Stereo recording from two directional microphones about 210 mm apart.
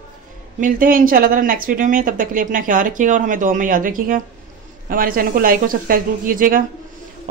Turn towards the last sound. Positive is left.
turn(degrees=-40)  # may be behind; listen again after turning